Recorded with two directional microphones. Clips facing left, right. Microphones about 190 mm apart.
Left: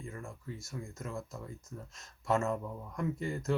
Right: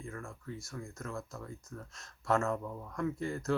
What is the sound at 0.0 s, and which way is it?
Speech, 20° left (ahead or behind).